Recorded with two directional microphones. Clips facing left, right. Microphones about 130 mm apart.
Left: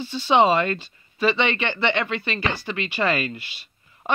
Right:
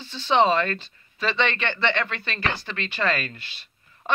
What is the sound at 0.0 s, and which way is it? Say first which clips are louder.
Speech: left 2 dB; 10° left (ahead or behind).